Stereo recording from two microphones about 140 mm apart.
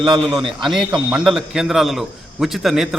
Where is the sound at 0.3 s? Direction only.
35° right (ahead or behind).